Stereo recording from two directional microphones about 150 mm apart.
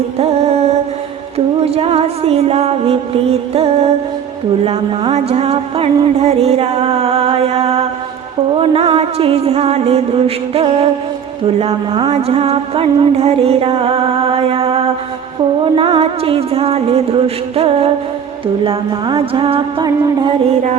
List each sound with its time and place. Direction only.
0.2 s music: 45° right (ahead or behind); by 20.3 s 30° right (ahead or behind)